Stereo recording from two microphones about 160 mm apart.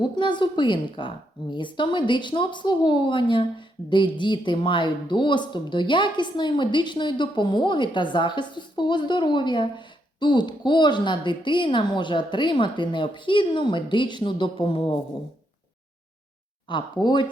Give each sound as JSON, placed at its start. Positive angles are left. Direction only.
{"t": 0.0, "sound": "a woman's voice", "side_deg": 30}
{"t": 16.6, "sound": "a woman's voice", "side_deg": 30}